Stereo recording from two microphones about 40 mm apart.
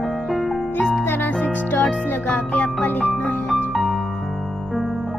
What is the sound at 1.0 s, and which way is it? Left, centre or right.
Music, left.